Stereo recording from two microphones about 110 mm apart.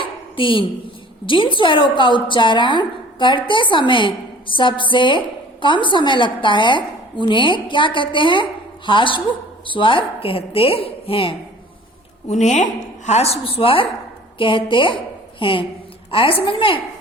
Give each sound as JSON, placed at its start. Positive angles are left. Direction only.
{"t": 0.0, "sound": "a sound", "side_deg": 50}
{"t": 1.3, "sound": "a woman's voice", "side_deg": 50}
{"t": 12.3, "sound": "a woman's voice", "side_deg": 90}
{"t": 13.1, "sound": "a woman's voice", "side_deg": 70}